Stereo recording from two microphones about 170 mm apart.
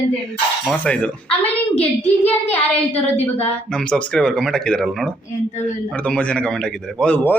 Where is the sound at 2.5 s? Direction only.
10° left (ahead or behind).